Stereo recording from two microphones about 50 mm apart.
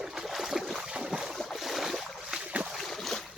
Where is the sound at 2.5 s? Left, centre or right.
Right.